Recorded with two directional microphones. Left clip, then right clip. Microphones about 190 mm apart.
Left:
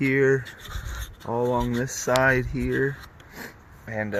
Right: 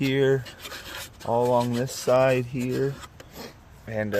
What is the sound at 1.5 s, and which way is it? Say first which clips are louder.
Speech: right 2 dB; 5° right (ahead or behind).